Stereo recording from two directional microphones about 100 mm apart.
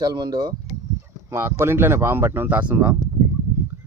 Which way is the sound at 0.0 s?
40° right (ahead or behind).